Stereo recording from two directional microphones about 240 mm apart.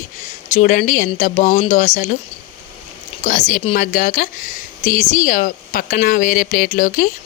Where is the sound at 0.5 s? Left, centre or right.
Left.